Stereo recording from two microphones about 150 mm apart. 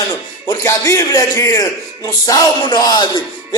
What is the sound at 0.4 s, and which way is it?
A man's voice, 25° left (ahead or behind).